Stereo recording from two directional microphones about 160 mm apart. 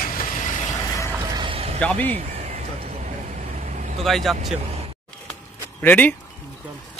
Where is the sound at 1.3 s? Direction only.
30° right (ahead or behind).